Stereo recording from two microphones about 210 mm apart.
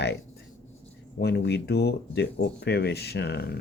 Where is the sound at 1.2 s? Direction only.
50° left (ahead or behind).